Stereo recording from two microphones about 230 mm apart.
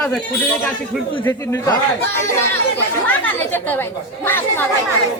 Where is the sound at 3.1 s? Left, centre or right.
Centre.